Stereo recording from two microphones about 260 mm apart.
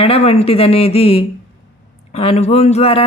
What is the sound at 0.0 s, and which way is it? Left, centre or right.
A woman's voice, left.